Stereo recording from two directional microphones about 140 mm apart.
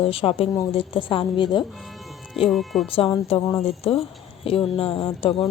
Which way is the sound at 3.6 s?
45° left (ahead or behind).